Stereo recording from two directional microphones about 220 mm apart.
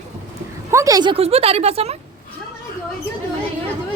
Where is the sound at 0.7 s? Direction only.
15° right (ahead or behind).